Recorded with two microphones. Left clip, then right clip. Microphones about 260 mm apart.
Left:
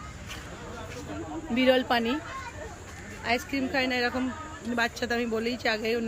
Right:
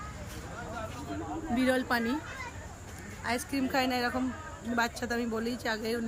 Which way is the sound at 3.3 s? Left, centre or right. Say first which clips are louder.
Left 4 dB; centre.